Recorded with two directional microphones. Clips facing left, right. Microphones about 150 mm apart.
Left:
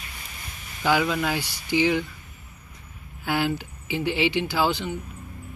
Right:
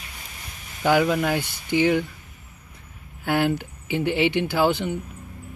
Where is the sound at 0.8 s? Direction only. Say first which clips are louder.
Right 3 dB; 45° right (ahead or behind).